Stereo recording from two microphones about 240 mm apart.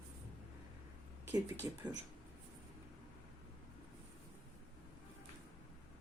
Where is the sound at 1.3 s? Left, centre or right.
Centre.